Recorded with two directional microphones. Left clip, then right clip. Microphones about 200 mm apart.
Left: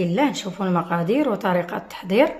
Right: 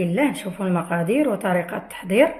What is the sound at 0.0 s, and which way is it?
A woman's voice, 5° left (ahead or behind).